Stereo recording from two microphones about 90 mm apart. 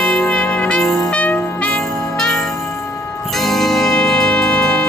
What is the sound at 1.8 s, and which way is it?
Jingle bell, 5° left (ahead or behind).